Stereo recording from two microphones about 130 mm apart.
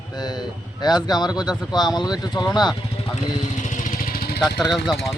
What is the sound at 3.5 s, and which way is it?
Vehicle, 70° left (ahead or behind).